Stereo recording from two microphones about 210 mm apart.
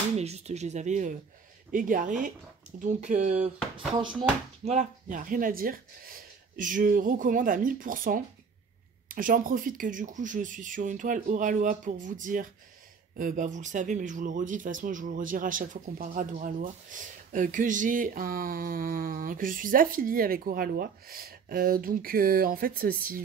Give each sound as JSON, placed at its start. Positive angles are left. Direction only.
{"t": 0.2, "sound": "speech", "side_deg": -30}